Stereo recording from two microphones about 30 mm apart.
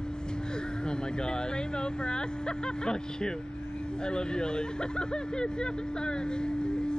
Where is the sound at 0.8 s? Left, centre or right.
Left.